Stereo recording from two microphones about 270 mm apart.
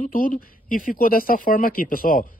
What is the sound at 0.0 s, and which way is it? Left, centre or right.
Speech, left.